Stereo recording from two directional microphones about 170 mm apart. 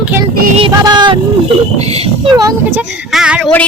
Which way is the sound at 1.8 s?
35° right (ahead or behind).